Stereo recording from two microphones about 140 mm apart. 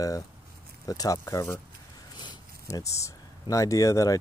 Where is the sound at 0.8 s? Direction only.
25° left (ahead or behind).